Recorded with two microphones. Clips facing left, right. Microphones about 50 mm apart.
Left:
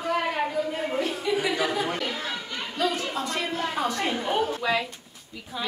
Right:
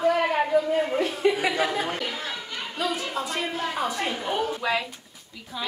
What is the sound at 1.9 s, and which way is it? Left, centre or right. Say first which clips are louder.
A woman's voice: left 1 dB; centre.